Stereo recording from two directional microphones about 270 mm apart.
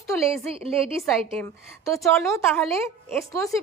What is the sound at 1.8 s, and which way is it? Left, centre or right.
A woman's voice, centre.